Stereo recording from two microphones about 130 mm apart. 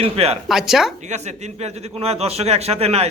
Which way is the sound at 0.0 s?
50° right (ahead or behind).